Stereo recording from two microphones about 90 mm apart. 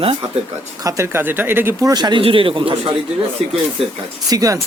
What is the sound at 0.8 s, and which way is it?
Speech, 35° right (ahead or behind).